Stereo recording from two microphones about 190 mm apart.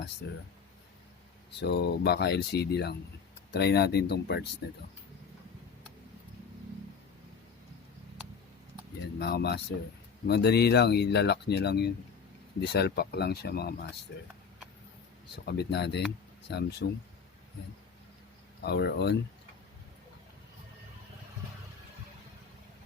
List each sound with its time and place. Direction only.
0.2 s speech: 60° left (ahead or behind)
1.5 s speech: 60° left (ahead or behind)
9.1 s speech: 60° left (ahead or behind)
15.5 s speech: 60° left (ahead or behind)
18.6 s speech: 60° left (ahead or behind)